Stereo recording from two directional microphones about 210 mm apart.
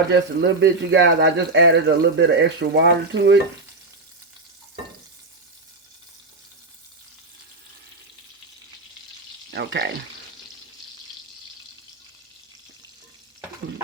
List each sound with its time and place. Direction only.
0.1 s speech: 55° right (ahead or behind)
9.5 s speech: 55° right (ahead or behind)